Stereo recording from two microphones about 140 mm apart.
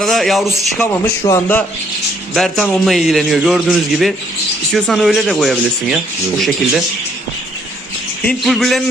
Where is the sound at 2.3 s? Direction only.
Centre (ahead or behind).